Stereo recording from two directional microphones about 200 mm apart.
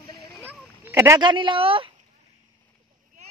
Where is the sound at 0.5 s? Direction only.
10° right (ahead or behind).